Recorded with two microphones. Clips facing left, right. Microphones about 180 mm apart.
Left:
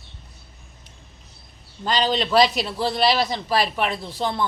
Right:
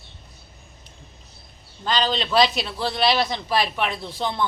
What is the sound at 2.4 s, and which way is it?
Speech, 40° left (ahead or behind).